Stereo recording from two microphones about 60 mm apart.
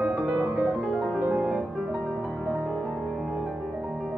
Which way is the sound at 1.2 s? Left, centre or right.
Centre.